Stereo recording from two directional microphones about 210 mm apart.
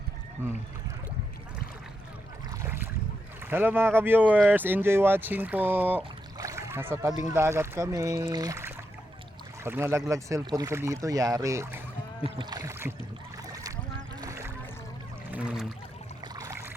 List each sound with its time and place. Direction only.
2.5 s boat: 10° right (ahead or behind)
3.4 s speech: 10° right (ahead or behind)
12.4 s rowboat: 20° right (ahead or behind)
14.2 s boat: 15° right (ahead or behind)
15.3 s a sound: 5° right (ahead or behind)
16.3 s boat: 15° right (ahead or behind)